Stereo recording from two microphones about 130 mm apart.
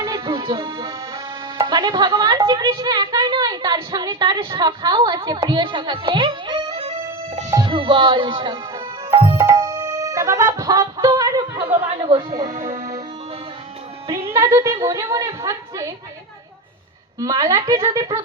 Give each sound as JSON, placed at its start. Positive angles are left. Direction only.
{"t": 0.0, "sound": "music", "side_deg": -30}
{"t": 1.5, "sound": "speech", "side_deg": -35}
{"t": 9.1, "sound": "music", "side_deg": -40}
{"t": 11.8, "sound": "speech", "side_deg": -45}
{"t": 12.3, "sound": "music", "side_deg": -30}
{"t": 14.3, "sound": "a woman's voice", "side_deg": -20}
{"t": 17.2, "sound": "speech", "side_deg": -25}